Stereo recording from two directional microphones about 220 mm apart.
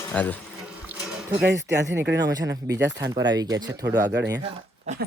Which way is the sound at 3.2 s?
15° right (ahead or behind).